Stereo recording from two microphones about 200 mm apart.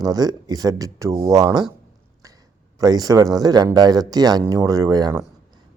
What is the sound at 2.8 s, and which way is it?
Speech, 20° right (ahead or behind).